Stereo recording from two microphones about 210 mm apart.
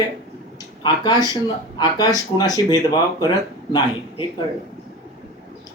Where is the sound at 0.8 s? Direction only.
20° left (ahead or behind).